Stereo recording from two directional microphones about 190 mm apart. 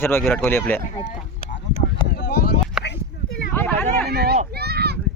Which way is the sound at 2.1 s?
55° left (ahead or behind).